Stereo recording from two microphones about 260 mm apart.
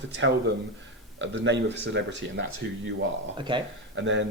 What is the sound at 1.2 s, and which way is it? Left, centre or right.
Speech, right.